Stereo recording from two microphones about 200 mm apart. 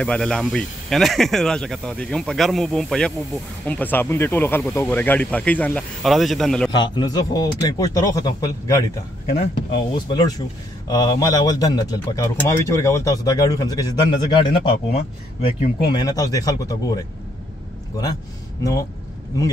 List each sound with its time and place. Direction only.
0.0 s speech: 5° left (ahead or behind)
6.8 s speech: 20° left (ahead or behind)
9.9 s speech: 20° left (ahead or behind)
18.6 s speech: 15° left (ahead or behind)